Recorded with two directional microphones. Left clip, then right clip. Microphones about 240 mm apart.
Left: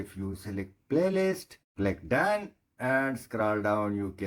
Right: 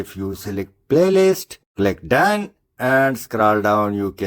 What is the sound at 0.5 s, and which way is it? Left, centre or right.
Speech, right.